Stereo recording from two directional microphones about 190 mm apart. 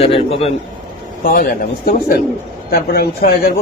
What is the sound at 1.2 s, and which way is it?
Speech, 50° left (ahead or behind).